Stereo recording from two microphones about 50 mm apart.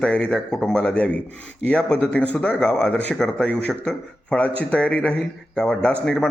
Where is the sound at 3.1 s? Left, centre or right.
Centre.